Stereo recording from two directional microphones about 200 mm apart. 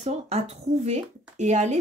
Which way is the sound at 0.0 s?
35° right (ahead or behind).